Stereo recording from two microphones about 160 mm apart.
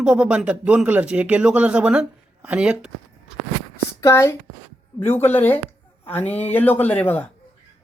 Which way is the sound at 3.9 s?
20° left (ahead or behind).